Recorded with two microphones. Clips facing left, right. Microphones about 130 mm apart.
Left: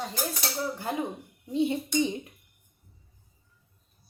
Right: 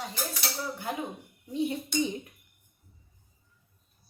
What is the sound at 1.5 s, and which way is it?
Speech, 25° left (ahead or behind).